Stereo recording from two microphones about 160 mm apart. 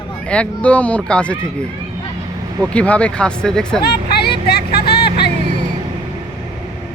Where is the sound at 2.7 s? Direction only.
10° left (ahead or behind).